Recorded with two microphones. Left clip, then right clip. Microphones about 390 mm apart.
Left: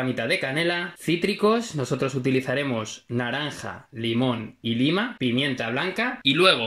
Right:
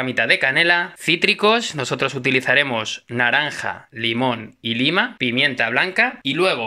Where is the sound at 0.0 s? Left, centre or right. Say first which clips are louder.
Right 8 dB; right.